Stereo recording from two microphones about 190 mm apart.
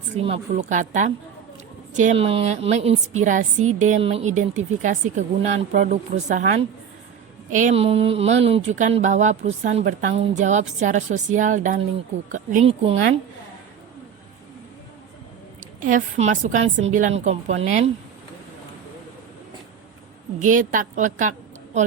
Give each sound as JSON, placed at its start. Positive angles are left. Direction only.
{"t": 0.2, "sound": "a woman's voice", "side_deg": -35}
{"t": 15.6, "sound": "a woman's voice", "side_deg": -45}
{"t": 20.4, "sound": "a woman's voice", "side_deg": -40}